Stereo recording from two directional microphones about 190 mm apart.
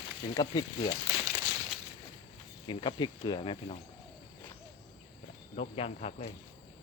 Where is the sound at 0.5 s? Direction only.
20° left (ahead or behind).